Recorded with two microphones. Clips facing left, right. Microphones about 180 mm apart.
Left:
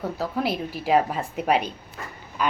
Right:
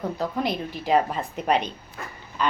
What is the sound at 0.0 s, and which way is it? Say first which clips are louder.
A woman's voice: even; 5° left (ahead or behind).